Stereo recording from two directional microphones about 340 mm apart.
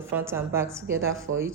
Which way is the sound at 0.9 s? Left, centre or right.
Right.